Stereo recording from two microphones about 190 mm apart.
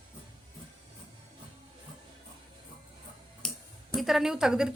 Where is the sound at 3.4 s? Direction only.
5° left (ahead or behind).